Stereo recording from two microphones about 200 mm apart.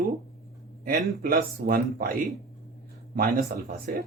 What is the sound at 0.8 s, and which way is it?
Speech, 45° right (ahead or behind).